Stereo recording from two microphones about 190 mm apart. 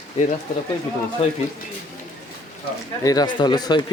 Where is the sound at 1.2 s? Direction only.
30° left (ahead or behind).